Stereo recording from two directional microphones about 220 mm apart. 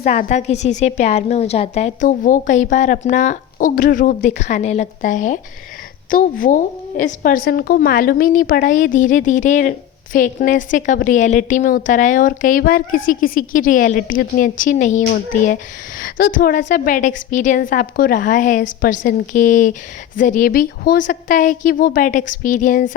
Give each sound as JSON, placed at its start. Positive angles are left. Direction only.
{"t": 0.0, "sound": "a woman's voice", "side_deg": 35}